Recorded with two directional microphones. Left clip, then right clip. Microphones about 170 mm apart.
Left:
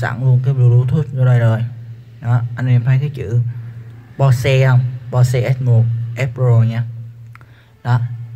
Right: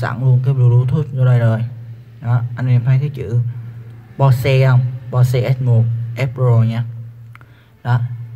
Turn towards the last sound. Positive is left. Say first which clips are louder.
# even
turn(degrees=0)  # may be behind; listen again after turning